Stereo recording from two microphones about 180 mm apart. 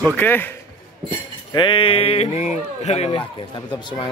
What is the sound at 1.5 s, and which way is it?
Speech, 30° left (ahead or behind).